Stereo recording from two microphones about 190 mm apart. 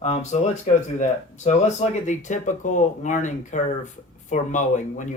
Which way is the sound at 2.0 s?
40° left (ahead or behind).